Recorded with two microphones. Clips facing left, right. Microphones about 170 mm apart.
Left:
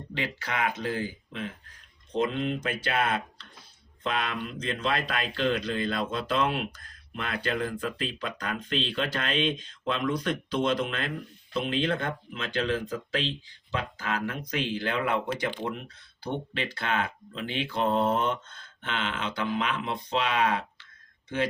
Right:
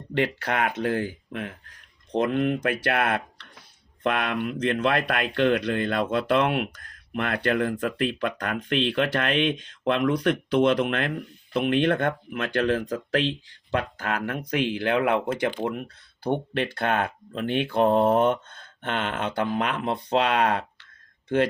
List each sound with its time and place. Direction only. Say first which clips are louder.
0.1 s speech: right 8 dB; 60° right (ahead or behind)